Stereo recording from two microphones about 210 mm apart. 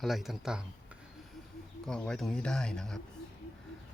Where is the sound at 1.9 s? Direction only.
5° left (ahead or behind).